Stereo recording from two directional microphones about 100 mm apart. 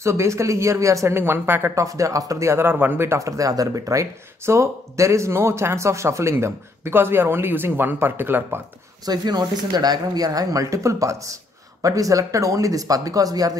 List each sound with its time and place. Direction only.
0.0 s speech: 30° right (ahead or behind)
1.9 s speech: 35° right (ahead or behind)
9.0 s speech: 45° right (ahead or behind)